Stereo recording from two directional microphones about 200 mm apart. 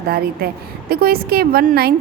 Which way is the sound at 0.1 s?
50° right (ahead or behind).